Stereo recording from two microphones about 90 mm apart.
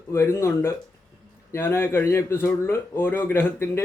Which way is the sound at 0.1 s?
30° left (ahead or behind).